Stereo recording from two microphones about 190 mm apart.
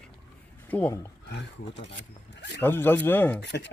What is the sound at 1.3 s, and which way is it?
Speech, 70° left (ahead or behind).